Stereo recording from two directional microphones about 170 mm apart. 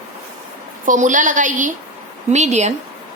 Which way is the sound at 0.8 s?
50° right (ahead or behind).